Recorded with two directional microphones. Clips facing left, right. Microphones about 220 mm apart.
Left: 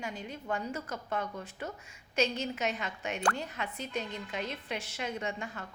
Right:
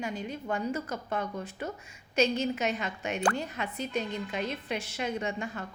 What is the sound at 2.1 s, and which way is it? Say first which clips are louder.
A woman's voice: right 4 dB; 15° right (ahead or behind).